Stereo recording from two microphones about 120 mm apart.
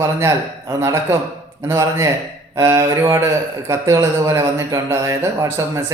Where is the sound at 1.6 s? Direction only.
20° right (ahead or behind).